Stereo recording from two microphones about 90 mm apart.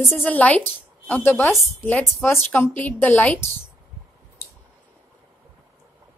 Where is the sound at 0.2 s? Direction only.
15° left (ahead or behind).